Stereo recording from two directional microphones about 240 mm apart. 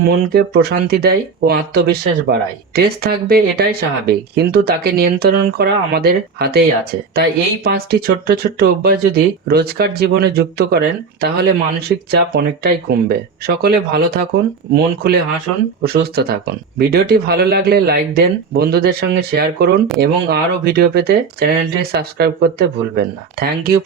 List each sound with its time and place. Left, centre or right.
0.1 s speech: right